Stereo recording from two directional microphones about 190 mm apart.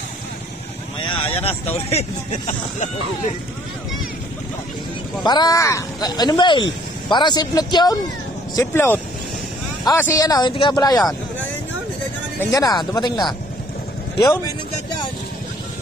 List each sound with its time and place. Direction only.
1.0 s speech: 30° left (ahead or behind)
5.2 s speech: 20° left (ahead or behind)
11.0 s vehicle: centre (ahead or behind)
12.4 s speech: 20° left (ahead or behind)